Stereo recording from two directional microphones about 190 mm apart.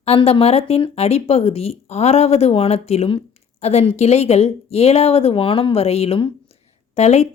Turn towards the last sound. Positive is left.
turn(degrees=35)  # may be behind; listen again after turning